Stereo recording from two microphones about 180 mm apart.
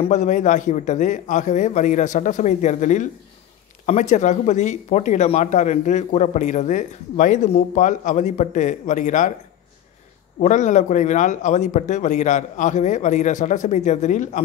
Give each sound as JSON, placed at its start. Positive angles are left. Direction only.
{"t": 0.0, "sound": "speech", "side_deg": 40}
{"t": 10.4, "sound": "speech", "side_deg": 40}